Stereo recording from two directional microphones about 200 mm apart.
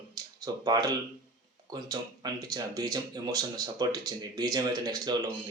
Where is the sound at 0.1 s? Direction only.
20° right (ahead or behind).